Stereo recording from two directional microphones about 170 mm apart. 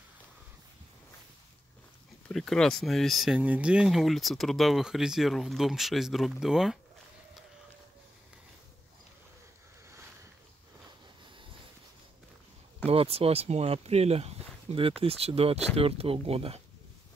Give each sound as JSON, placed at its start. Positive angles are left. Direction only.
{"t": 2.2, "sound": "speech", "side_deg": 0}
{"t": 12.8, "sound": "speech", "side_deg": -35}